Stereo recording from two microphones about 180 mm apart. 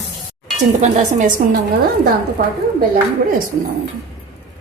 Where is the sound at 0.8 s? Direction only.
45° right (ahead or behind).